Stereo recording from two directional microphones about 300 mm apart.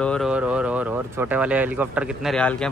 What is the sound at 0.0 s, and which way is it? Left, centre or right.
Speech, centre.